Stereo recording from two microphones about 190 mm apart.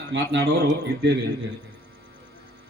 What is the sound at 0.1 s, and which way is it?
Speech, 60° right (ahead or behind).